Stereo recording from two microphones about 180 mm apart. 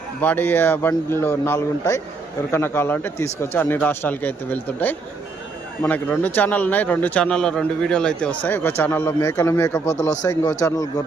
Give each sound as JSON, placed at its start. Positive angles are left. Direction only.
{"t": 0.2, "sound": "a man's voice", "side_deg": 10}